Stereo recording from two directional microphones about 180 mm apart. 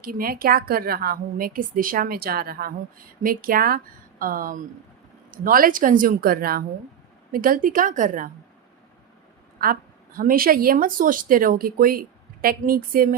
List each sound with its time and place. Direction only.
0.0 s a woman's voice: 55° right (ahead or behind)
9.6 s a woman's voice: 50° right (ahead or behind)